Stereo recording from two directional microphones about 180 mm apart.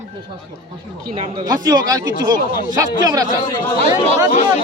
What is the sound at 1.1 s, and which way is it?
A man's voice, 30° right (ahead or behind).